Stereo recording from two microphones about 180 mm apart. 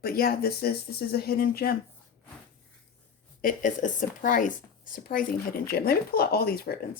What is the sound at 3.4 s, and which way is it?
Speech, 45° left (ahead or behind).